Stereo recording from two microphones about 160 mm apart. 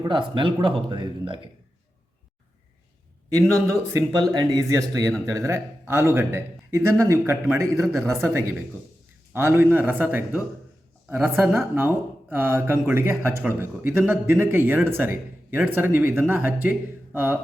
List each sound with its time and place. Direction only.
0.0 s speech: 30° right (ahead or behind)
3.5 s a man's voice: 20° right (ahead or behind)